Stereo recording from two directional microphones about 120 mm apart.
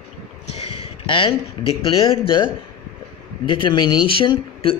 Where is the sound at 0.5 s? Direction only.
60° left (ahead or behind).